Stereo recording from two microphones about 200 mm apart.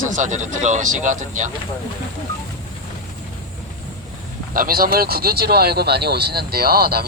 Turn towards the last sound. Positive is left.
turn(degrees=-50)  # may be behind; listen again after turning